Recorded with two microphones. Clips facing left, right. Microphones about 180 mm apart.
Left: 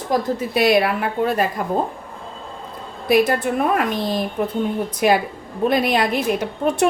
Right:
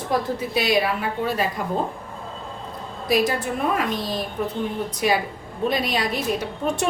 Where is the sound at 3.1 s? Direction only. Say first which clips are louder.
Left 5 dB; 60° left (ahead or behind).